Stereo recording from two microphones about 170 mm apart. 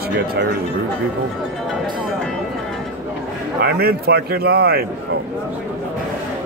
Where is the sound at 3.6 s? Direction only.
65° right (ahead or behind).